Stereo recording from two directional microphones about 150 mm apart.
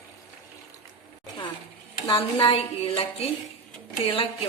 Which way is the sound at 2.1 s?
35° left (ahead or behind).